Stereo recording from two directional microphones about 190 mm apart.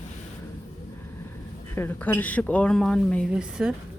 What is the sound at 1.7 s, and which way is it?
Speech, 10° left (ahead or behind).